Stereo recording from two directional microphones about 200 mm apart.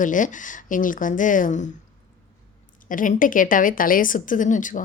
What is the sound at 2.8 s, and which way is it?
A woman's voice, 40° left (ahead or behind).